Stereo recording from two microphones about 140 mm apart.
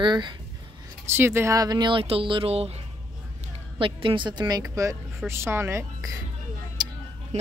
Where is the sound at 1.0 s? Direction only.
15° right (ahead or behind); by 2.7 s 45° right (ahead or behind).